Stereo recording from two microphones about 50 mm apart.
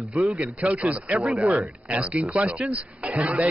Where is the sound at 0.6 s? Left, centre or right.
Right.